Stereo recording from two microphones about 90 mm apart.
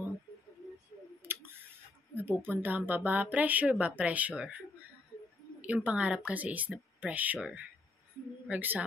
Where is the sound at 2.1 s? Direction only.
20° right (ahead or behind).